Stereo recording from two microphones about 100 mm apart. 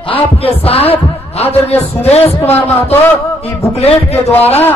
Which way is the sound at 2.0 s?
90° left.